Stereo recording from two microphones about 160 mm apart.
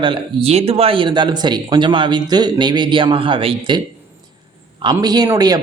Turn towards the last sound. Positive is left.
turn(degrees=-25)  # may be behind; listen again after turning